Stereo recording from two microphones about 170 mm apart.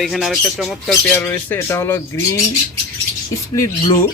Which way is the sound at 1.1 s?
10° left (ahead or behind).